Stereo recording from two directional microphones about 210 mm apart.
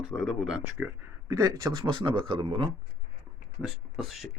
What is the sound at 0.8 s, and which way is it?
Speech, 15° right (ahead or behind).